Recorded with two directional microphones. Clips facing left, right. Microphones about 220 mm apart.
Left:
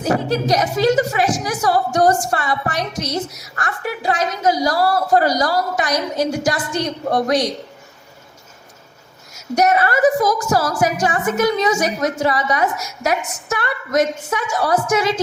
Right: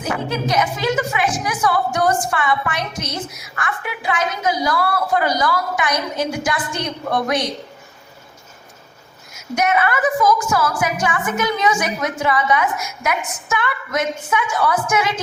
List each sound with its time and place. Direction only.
0.0 s a woman's voice: 40° left (ahead or behind)
9.6 s a woman's voice: 35° left (ahead or behind)